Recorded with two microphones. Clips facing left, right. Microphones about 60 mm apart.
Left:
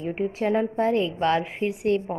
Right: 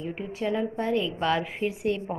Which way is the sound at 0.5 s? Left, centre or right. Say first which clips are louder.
Left 4 dB; left.